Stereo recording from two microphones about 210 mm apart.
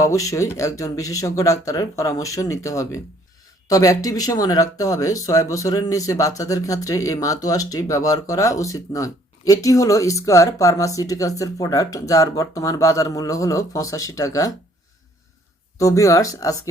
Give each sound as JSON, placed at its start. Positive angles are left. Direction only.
{"t": 0.0, "sound": "speech", "side_deg": 15}
{"t": 15.8, "sound": "speech", "side_deg": 15}